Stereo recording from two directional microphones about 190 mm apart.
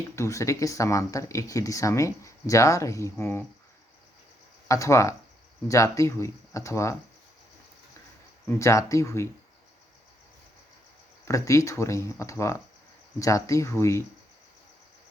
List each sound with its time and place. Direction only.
0.2 s speech: 15° left (ahead or behind)
4.7 s speech: 15° left (ahead or behind)
8.4 s speech: 15° left (ahead or behind)
11.3 s speech: 15° left (ahead or behind)